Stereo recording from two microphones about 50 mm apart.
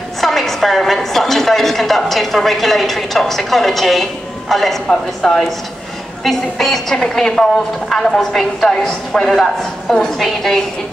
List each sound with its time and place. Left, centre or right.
0.2 s a woman's voice: centre